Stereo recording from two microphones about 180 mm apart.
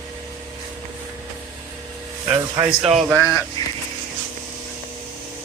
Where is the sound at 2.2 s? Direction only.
15° right (ahead or behind).